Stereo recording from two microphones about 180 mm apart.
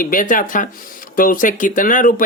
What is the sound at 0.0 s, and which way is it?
Speech, 50° left (ahead or behind).